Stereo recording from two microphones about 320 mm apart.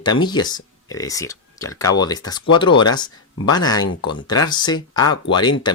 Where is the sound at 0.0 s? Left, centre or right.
Centre.